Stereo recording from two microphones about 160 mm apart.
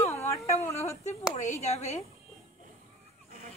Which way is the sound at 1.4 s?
45° left (ahead or behind).